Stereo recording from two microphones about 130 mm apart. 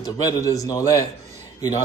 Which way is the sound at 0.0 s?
30° left (ahead or behind).